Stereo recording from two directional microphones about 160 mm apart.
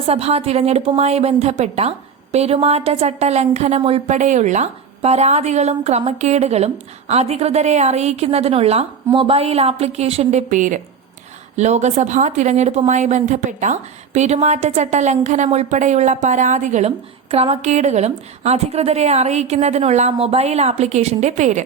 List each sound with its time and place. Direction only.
0.0 s a woman's voice: 40° right (ahead or behind)